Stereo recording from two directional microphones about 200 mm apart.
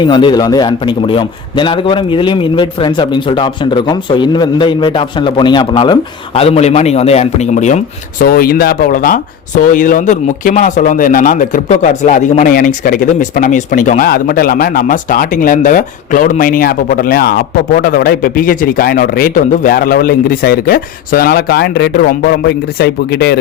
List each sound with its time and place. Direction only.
0.0 s a man's voice: 20° left (ahead or behind)
8.2 s speech: 50° left (ahead or behind)